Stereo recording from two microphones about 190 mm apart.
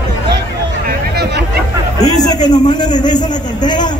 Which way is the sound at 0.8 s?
60° right (ahead or behind).